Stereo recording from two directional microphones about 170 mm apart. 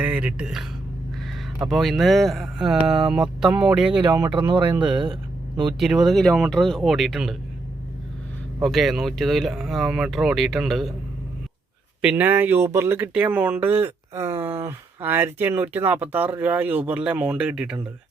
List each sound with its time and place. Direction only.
0.0 s speech: 10° right (ahead or behind)
3.9 s speech: 25° right (ahead or behind)
4.7 s speech: 5° right (ahead or behind)
8.6 s speech: centre (ahead or behind)
12.0 s speech: 10° right (ahead or behind)